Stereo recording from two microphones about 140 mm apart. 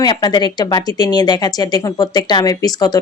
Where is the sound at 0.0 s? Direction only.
30° left (ahead or behind).